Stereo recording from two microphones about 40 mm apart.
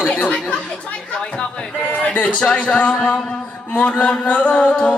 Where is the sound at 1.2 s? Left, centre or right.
Left.